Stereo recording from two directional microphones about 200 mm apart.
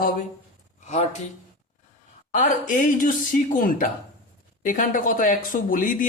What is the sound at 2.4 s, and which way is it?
Speech, 40° left (ahead or behind).